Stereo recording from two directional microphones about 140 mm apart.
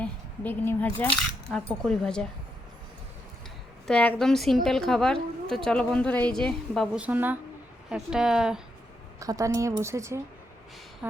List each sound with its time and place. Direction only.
0.0 s a woman's voice: 15° left (ahead or behind)
3.8 s a woman's voice: 10° left (ahead or behind)
6.9 s a woman's voice: 10° right (ahead or behind)
9.1 s a woman's voice: 25° right (ahead or behind)